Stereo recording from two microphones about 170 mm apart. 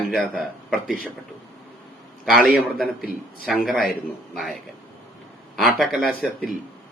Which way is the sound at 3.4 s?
Centre (ahead or behind).